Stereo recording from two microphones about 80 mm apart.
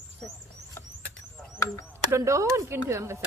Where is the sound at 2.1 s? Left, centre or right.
Right.